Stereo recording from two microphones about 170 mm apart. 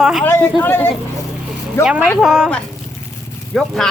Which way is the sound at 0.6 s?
15° left (ahead or behind).